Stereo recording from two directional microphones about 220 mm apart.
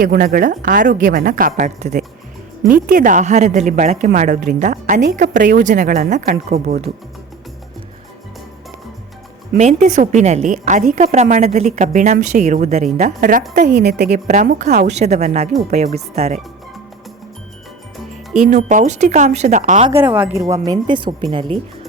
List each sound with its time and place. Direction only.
0.0 s a woman's voice: 40° right (ahead or behind)
9.6 s a woman's voice: 35° right (ahead or behind)
13.7 s speech: 50° right (ahead or behind)
14.1 s a woman's voice: 30° right (ahead or behind)
18.1 s a woman's voice: 35° right (ahead or behind)
19.9 s speech: 10° right (ahead or behind)